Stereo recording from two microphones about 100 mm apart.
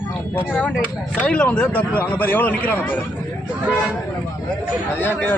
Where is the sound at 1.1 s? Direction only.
10° left (ahead or behind).